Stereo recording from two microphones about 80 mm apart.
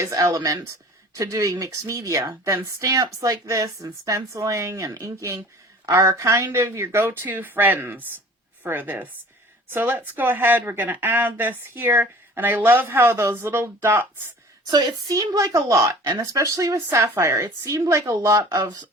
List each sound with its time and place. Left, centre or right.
0.0 s a woman's voice: right
14.7 s speech: right
15.1 s speech: right
18.4 s speech: right